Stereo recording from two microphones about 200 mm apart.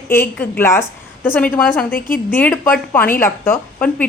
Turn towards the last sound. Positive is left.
turn(degrees=10)  # may be behind; listen again after turning